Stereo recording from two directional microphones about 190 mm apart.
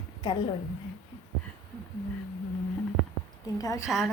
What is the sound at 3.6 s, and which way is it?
Speech, 20° left (ahead or behind).